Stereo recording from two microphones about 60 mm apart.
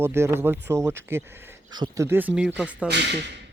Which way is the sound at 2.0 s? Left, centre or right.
Right.